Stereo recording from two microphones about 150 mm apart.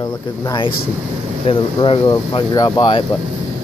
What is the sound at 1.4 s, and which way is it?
Speech, 35° left (ahead or behind).